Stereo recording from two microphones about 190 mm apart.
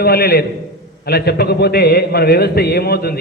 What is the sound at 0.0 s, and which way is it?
A man's voice, 55° left (ahead or behind).